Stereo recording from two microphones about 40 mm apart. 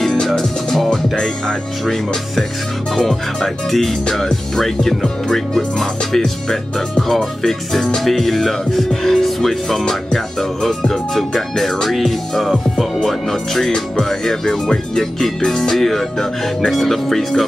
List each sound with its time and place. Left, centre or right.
0.3 s music: centre
3.0 s speech: centre
13.7 s music: centre
14.0 s speech: centre